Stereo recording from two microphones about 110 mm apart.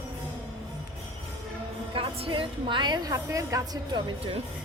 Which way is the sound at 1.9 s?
55° right (ahead or behind).